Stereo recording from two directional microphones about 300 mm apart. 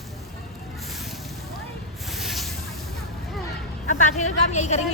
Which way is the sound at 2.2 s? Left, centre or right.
Centre.